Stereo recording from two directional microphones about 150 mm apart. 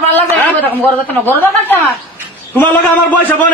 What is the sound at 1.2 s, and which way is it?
A man's voice, 15° left (ahead or behind).